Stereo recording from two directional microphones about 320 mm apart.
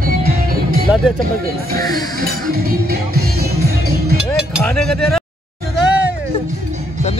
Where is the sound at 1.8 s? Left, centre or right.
Centre.